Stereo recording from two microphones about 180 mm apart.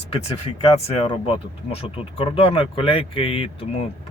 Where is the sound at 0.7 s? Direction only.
35° left (ahead or behind).